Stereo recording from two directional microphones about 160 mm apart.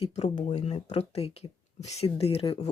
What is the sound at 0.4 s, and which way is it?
Speech, 45° left (ahead or behind).